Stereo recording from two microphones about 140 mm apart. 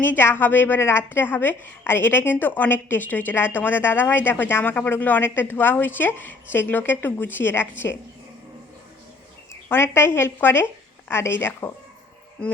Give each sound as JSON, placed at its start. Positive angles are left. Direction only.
{"t": 0.0, "sound": "a woman's voice", "side_deg": 15}
{"t": 9.5, "sound": "a woman's voice", "side_deg": 15}